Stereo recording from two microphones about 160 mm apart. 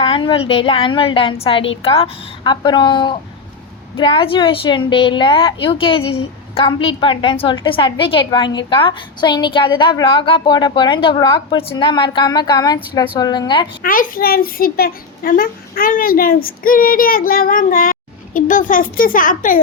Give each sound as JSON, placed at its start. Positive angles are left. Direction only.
{"t": 0.0, "sound": "a woman's voice", "side_deg": 30}
{"t": 13.8, "sound": "a child's voice", "side_deg": 60}